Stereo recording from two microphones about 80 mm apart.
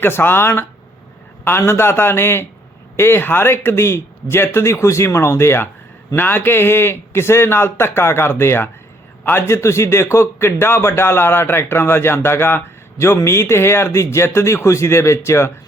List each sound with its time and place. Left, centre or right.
0.0 s a man's voice: left